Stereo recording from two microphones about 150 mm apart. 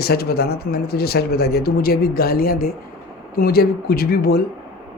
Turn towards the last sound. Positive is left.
turn(degrees=90)